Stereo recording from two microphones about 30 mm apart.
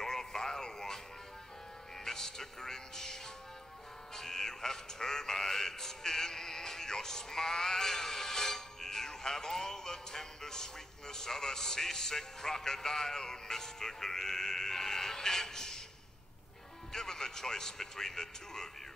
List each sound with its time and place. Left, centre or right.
0.0 s music: centre
2.0 s music: centre
16.9 s music: centre